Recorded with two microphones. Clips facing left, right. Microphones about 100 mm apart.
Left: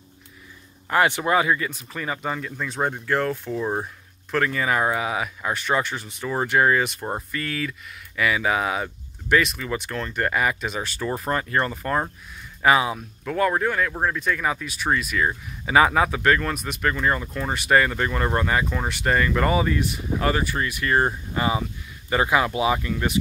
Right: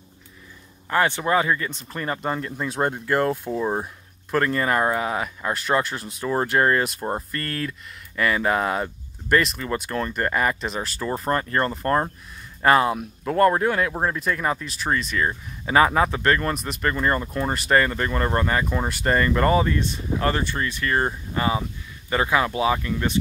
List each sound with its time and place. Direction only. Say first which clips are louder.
0.8 s speech: left 1 dB; 15° left (ahead or behind); by 3.6 s 15° right (ahead or behind)
3.6 s speech: right 1 dB; 5° right (ahead or behind)
14.2 s speech: even; centre (ahead or behind)
18.7 s speech: right 1 dB; 5° right (ahead or behind); by 23.1 s 15° left (ahead or behind)